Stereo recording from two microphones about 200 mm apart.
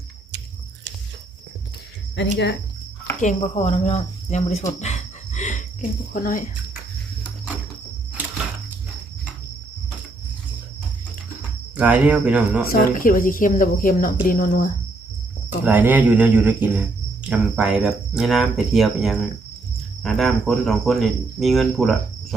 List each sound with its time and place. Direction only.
2.1 s speech: 60° left (ahead or behind)
3.2 s speech: 35° left (ahead or behind)
4.8 s cricket: 35° left (ahead or behind)
6.1 s speech: 45° left (ahead or behind)
11.8 s speech: 5° right (ahead or behind)
12.7 s speech: 45° left (ahead or behind)
15.6 s speech: 10° right (ahead or behind)
17.2 s cricket: 5° right (ahead or behind)